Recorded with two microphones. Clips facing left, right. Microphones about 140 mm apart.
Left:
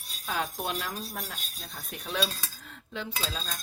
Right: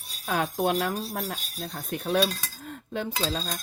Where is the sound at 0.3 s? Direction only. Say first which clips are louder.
Right 7 dB; 55° right (ahead or behind).